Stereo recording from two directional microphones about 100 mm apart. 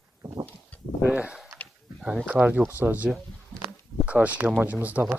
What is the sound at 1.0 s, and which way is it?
Speech, 15° right (ahead or behind).